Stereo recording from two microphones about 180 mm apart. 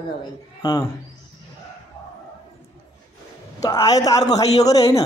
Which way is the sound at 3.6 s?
20° left (ahead or behind).